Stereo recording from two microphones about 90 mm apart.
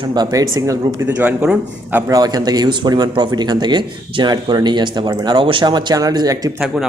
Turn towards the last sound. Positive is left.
turn(degrees=-45)  # may be behind; listen again after turning